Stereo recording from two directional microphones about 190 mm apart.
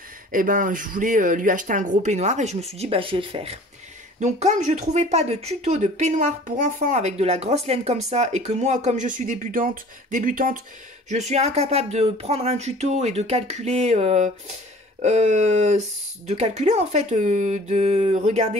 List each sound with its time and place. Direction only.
0.3 s speech: 45° right (ahead or behind)